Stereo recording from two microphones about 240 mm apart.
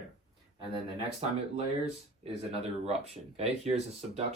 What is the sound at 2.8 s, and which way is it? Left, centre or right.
Speech, right.